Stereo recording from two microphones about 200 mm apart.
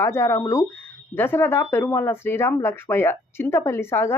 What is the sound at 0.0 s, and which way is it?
Speech, 15° left (ahead or behind).